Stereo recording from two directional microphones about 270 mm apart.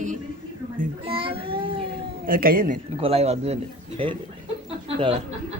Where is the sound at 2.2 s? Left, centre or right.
Right.